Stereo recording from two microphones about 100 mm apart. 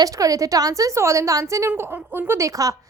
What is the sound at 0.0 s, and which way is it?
A woman's voice, 35° right (ahead or behind).